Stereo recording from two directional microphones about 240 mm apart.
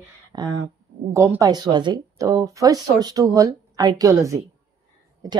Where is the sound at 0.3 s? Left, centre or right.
Centre.